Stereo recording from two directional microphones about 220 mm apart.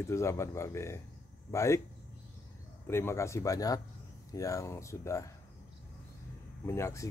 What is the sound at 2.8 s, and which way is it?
Speech, 10° left (ahead or behind).